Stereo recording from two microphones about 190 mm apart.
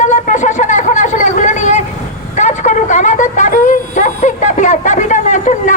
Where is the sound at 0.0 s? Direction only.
40° left (ahead or behind).